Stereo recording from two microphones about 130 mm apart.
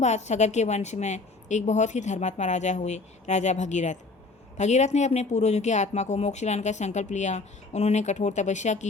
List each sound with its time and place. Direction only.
0.0 s speech: 60° left (ahead or behind)